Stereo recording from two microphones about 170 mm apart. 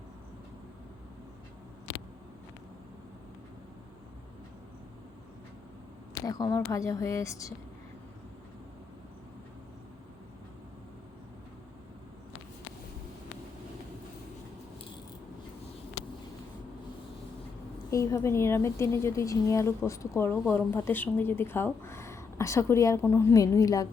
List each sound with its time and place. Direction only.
6.2 s speech: 20° left (ahead or behind)
17.9 s speech: 15° left (ahead or behind)